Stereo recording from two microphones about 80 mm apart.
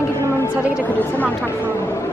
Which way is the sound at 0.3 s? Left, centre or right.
Left.